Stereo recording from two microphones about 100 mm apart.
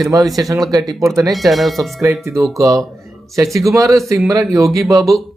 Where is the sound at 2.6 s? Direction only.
35° right (ahead or behind).